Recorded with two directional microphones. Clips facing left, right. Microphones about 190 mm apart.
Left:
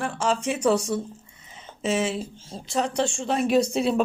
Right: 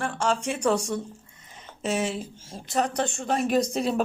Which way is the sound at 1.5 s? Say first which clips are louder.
Left 2 dB; centre (ahead or behind).